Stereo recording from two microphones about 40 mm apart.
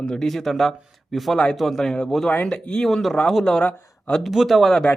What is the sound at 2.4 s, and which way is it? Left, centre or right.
Speech, left.